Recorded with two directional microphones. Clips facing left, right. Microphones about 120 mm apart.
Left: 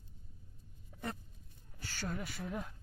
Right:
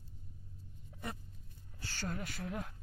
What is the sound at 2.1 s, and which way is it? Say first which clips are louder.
Speech: even; centre (ahead or behind).